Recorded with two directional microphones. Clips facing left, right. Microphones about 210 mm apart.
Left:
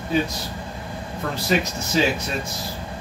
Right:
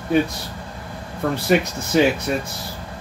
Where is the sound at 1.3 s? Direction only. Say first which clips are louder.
Right 4 dB; 60° right (ahead or behind).